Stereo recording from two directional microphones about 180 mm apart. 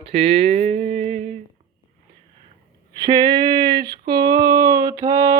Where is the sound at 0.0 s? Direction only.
30° right (ahead or behind).